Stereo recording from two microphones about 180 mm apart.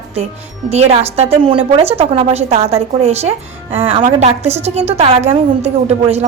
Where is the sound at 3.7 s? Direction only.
35° right (ahead or behind).